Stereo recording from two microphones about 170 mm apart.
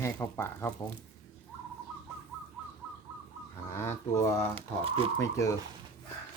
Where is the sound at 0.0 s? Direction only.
15° left (ahead or behind).